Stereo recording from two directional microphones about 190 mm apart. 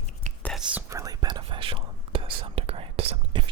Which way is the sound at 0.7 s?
10° right (ahead or behind).